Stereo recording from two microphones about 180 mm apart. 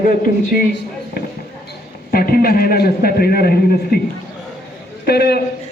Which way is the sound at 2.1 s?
55° left (ahead or behind).